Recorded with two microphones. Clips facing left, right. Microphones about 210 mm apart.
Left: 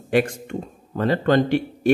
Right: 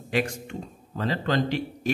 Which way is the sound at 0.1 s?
55° left (ahead or behind).